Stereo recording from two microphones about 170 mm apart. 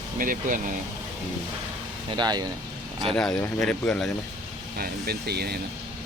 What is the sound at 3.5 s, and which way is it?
Speech, 5° left (ahead or behind).